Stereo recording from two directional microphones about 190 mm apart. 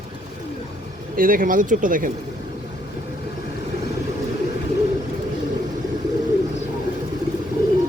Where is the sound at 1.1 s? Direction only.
50° right (ahead or behind).